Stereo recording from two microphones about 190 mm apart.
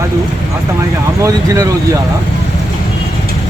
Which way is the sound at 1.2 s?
15° right (ahead or behind).